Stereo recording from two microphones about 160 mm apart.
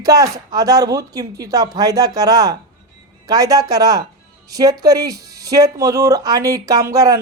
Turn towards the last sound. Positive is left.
turn(degrees=-20)  # may be behind; listen again after turning